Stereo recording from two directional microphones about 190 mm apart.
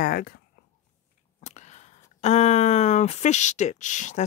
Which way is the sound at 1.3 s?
40° left (ahead or behind).